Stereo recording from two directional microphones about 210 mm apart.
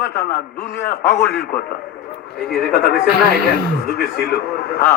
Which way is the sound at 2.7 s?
50° left (ahead or behind).